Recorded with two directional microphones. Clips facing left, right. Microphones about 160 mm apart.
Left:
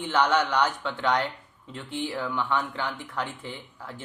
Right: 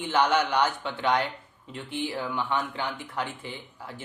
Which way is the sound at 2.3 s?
15° right (ahead or behind).